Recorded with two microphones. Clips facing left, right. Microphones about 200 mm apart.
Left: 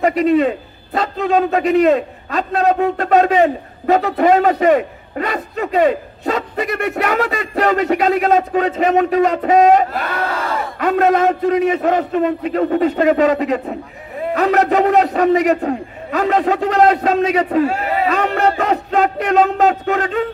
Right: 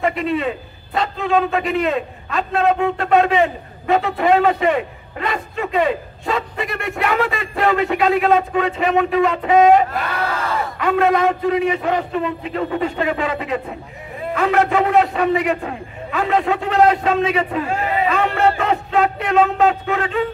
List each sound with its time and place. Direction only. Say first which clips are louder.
0.0 s a man's voice: left 6 dB; 40° left (ahead or behind)
18.0 s music: left 1 dB; 40° left (ahead or behind)